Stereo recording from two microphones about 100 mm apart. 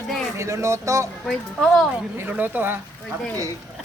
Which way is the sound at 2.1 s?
15° right (ahead or behind).